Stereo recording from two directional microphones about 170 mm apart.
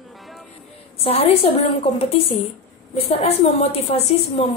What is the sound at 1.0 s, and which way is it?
Speech, 35° left (ahead or behind).